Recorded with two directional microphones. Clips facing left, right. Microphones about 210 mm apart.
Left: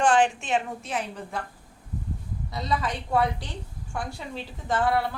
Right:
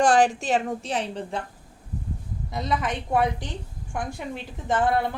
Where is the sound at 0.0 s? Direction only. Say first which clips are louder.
Right 2 dB; 40° right (ahead or behind).